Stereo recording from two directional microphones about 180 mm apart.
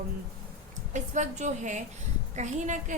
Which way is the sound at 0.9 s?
40° right (ahead or behind).